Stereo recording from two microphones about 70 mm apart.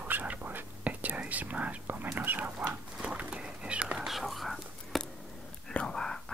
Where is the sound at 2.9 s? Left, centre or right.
Centre.